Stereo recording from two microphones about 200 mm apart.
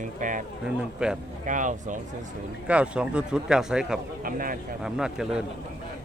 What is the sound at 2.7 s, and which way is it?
Speech, 5° right (ahead or behind).